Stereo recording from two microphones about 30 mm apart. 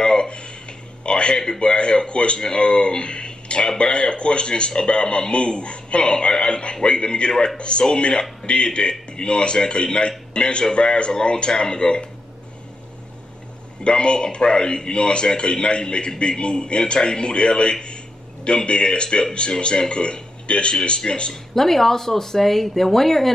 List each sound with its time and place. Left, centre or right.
0.0 s a sound: left
1.6 s a man's voice: left
13.8 s a man's voice: left
19.0 s a man's voice: left
21.3 s speech: centre